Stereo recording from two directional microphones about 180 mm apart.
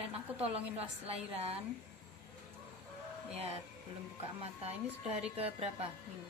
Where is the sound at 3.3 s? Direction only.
35° right (ahead or behind).